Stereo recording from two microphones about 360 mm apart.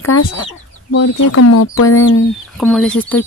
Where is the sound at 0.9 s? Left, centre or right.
Left.